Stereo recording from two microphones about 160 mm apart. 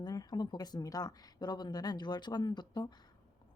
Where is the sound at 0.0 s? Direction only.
25° left (ahead or behind).